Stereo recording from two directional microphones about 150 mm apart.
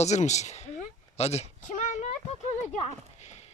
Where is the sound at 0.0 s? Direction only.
50° left (ahead or behind).